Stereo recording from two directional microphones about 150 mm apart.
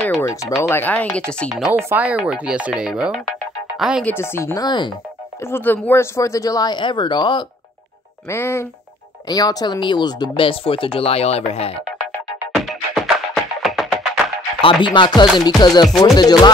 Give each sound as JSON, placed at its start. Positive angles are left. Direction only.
{"t": 0.2, "sound": "music", "side_deg": 20}
{"t": 0.6, "sound": "speech", "side_deg": 15}
{"t": 1.5, "sound": "speech", "side_deg": -5}
{"t": 4.0, "sound": "speech", "side_deg": 15}
{"t": 5.4, "sound": "speech", "side_deg": 15}
{"t": 8.3, "sound": "speech", "side_deg": 15}
{"t": 12.5, "sound": "music", "side_deg": 0}
{"t": 14.6, "sound": "speech", "side_deg": 35}